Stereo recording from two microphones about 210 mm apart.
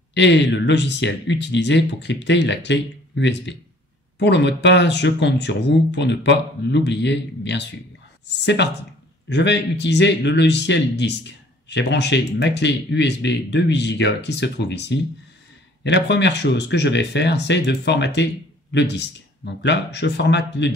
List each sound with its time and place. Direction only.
0.1 s speech: 55° left (ahead or behind)